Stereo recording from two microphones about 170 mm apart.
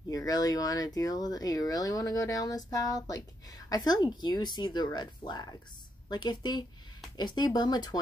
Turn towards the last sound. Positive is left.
turn(degrees=25)  # may be behind; listen again after turning